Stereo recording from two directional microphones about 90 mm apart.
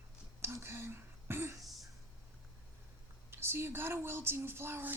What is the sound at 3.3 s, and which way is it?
Speech, 25° right (ahead or behind).